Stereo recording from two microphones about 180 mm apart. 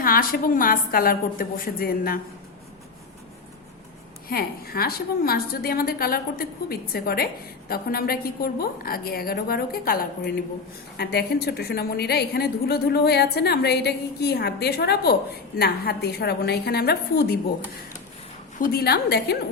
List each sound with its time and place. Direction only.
0.0 s a woman's voice: 55° left (ahead or behind)
4.3 s a woman's voice: 55° left (ahead or behind)
18.6 s a woman's voice: 60° left (ahead or behind)